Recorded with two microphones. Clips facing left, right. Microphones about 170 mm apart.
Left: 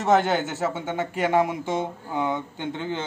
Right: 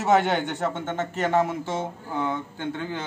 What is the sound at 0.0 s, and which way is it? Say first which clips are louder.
A man's voice: left 1 dB; centre (ahead or behind).